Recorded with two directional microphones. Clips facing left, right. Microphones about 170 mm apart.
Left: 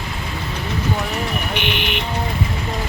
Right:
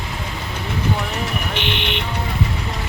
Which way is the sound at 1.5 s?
30° right (ahead or behind).